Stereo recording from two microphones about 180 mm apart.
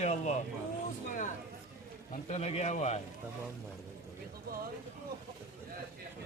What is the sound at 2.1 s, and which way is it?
Speech, 40° left (ahead or behind).